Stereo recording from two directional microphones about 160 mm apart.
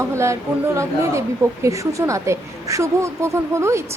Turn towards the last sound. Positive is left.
turn(degrees=-15)  # may be behind; listen again after turning